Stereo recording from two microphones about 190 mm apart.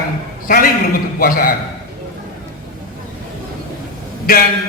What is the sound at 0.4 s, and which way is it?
A man's voice, 50° left (ahead or behind).